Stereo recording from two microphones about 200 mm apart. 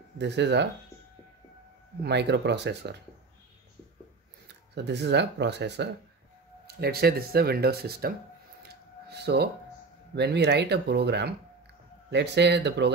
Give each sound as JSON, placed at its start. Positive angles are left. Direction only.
{"t": 0.2, "sound": "speech", "side_deg": -60}
{"t": 2.0, "sound": "speech", "side_deg": -60}
{"t": 4.7, "sound": "speech", "side_deg": -60}
{"t": 9.1, "sound": "speech", "side_deg": -55}